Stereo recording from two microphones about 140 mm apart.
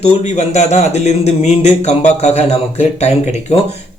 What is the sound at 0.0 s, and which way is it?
Speech, 55° left (ahead or behind).